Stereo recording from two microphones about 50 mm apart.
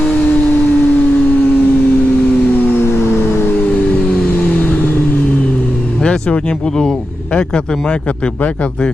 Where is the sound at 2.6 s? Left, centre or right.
Left.